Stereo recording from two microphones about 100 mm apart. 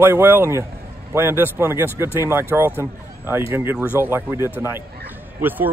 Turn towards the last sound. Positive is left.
turn(degrees=-20)  # may be behind; listen again after turning